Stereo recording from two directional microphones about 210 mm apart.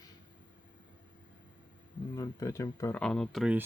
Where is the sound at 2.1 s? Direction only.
15° left (ahead or behind); by 3.6 s centre (ahead or behind).